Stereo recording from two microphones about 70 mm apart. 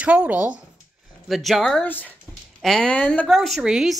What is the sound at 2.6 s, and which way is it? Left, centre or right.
Speech, centre.